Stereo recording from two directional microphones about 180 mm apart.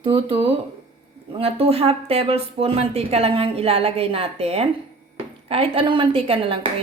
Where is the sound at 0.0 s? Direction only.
30° right (ahead or behind).